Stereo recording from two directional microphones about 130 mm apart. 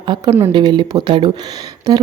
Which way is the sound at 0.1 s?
35° right (ahead or behind).